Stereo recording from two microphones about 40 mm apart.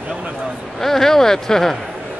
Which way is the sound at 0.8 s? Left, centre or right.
Centre.